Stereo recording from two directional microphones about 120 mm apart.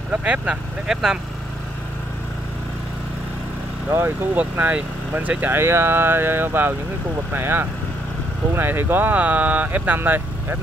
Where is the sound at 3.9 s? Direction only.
20° right (ahead or behind).